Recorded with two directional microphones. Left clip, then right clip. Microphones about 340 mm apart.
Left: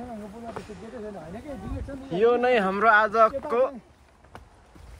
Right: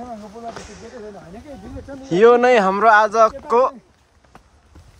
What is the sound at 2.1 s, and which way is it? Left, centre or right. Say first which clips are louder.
Speech: right 9 dB; centre.